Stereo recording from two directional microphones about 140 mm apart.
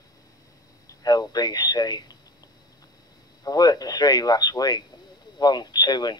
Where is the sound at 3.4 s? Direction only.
25° left (ahead or behind).